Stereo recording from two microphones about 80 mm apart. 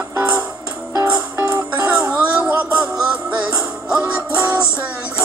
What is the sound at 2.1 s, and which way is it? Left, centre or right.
Music, centre.